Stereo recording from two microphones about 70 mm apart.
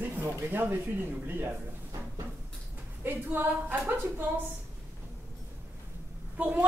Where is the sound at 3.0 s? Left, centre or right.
Right.